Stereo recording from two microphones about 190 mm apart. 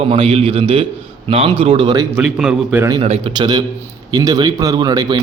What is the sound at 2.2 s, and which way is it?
Speech, 5° right (ahead or behind).